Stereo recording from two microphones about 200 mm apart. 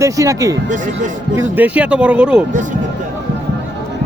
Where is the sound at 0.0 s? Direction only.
15° right (ahead or behind).